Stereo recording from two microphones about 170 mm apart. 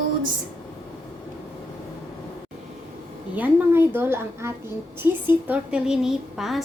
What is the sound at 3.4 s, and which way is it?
A woman's voice, 10° right (ahead or behind).